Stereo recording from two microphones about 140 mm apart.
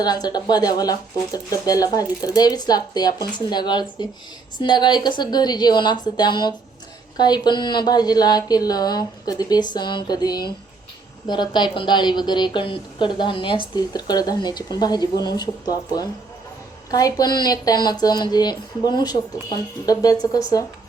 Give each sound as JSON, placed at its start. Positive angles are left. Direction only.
{"t": 0.0, "sound": "a woman's voice", "side_deg": 30}